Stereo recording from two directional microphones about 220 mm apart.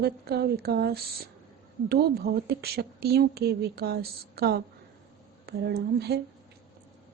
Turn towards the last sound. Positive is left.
turn(degrees=-45)  # may be behind; listen again after turning